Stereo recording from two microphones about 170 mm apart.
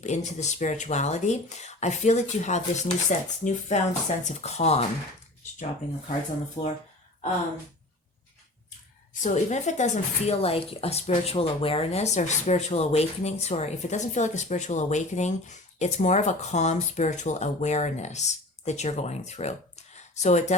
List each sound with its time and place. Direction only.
0.0 s speech: 45° left (ahead or behind)
6.6 s speech: 40° left (ahead or behind)
9.2 s speech: 45° left (ahead or behind)